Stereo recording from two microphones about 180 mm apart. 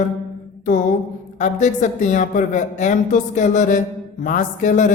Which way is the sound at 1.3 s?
40° left (ahead or behind).